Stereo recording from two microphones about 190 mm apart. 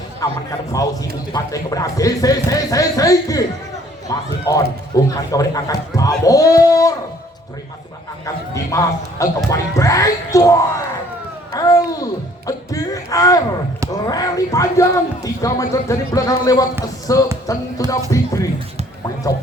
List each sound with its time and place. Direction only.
0.2 s speech: 20° left (ahead or behind)
8.7 s speech: 15° left (ahead or behind)
17.4 s music: 15° left (ahead or behind)